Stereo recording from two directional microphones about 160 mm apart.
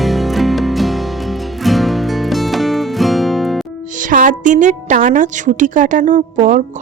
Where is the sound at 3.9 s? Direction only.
55° right (ahead or behind).